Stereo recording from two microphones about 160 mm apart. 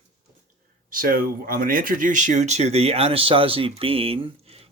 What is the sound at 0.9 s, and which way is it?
Speech, 60° right (ahead or behind).